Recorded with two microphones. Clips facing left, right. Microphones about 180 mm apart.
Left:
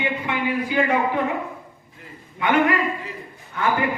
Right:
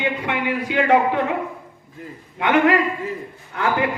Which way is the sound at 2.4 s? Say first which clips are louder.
Right 3 dB; 80° right.